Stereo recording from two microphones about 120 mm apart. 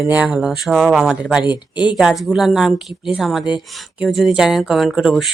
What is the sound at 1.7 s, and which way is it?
Speech, 40° left (ahead or behind).